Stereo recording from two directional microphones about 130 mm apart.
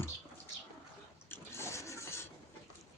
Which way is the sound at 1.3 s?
20° left (ahead or behind).